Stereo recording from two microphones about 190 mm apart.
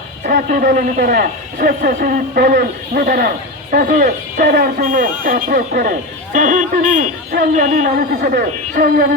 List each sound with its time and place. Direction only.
0.3 s a man's voice: 50° right (ahead or behind)